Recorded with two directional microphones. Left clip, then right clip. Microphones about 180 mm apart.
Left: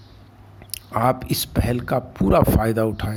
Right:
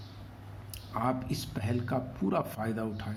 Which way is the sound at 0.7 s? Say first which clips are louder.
Left 12 dB; 60° left (ahead or behind).